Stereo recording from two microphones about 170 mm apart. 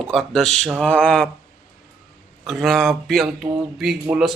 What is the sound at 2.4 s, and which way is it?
Speech, centre (ahead or behind).